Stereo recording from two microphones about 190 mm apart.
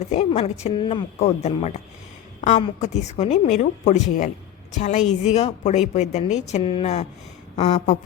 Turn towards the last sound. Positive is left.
turn(degrees=35)  # may be behind; listen again after turning